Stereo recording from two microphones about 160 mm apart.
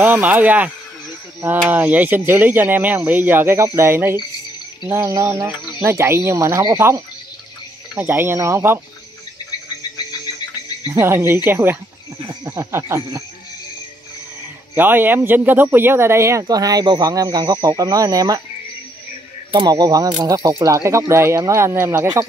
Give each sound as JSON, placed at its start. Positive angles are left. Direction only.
{"t": 0.0, "sound": "speech", "side_deg": -10}
{"t": 1.7, "sound": "speech", "side_deg": -10}
{"t": 10.9, "sound": "speech", "side_deg": -15}
{"t": 14.8, "sound": "speech", "side_deg": -10}
{"t": 19.5, "sound": "speech", "side_deg": -25}